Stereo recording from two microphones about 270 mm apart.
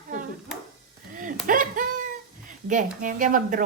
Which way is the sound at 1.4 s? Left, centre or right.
Right.